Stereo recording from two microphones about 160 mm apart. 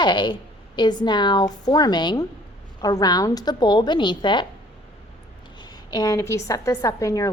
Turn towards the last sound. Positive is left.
turn(degrees=20)  # may be behind; listen again after turning